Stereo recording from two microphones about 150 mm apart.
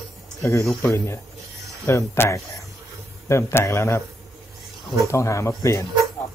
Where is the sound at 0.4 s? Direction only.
20° left (ahead or behind).